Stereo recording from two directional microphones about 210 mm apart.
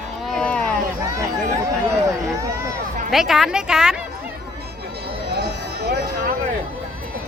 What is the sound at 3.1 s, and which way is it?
Speech, centre (ahead or behind).